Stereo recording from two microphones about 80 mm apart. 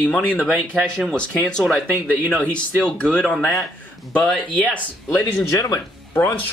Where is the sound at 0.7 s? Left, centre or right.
Centre.